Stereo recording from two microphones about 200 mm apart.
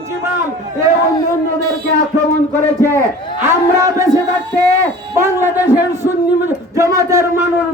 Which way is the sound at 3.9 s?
15° right (ahead or behind).